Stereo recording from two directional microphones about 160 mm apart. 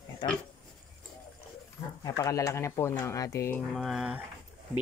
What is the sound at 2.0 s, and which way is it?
Speech, 20° left (ahead or behind).